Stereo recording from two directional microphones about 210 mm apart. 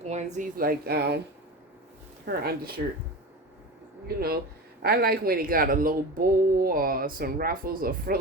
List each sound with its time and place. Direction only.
0.0 s speech: 35° right (ahead or behind); by 1.2 s 50° right (ahead or behind)
2.2 s speech: 50° right (ahead or behind)
4.8 s speech: 50° right (ahead or behind)